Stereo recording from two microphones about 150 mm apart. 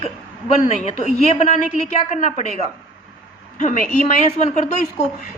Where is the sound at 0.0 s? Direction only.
50° left (ahead or behind).